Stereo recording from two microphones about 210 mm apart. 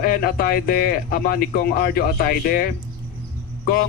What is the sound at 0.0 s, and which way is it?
Speech, 45° left (ahead or behind).